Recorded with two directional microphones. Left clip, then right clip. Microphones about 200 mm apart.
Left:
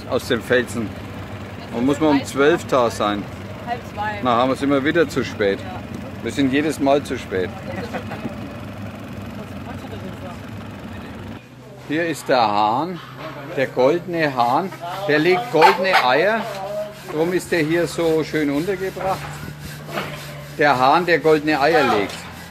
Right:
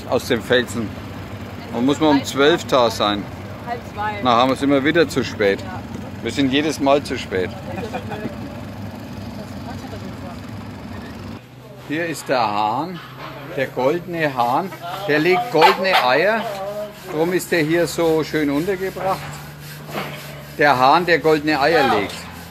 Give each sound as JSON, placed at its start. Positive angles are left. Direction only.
{"t": 0.1, "sound": "speech", "side_deg": -5}
{"t": 6.2, "sound": "speech", "side_deg": 5}
{"t": 11.9, "sound": "speech", "side_deg": 25}
{"t": 15.1, "sound": "speech", "side_deg": 0}
{"t": 17.2, "sound": "speech", "side_deg": -15}
{"t": 20.5, "sound": "speech", "side_deg": -5}